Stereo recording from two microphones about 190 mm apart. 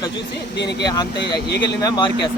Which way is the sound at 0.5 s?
65° left (ahead or behind).